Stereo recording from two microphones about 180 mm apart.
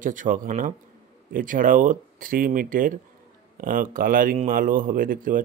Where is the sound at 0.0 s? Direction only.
45° right (ahead or behind).